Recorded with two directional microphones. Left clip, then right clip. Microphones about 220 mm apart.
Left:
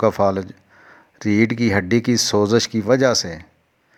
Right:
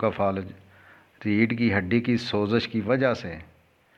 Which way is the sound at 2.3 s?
35° left (ahead or behind).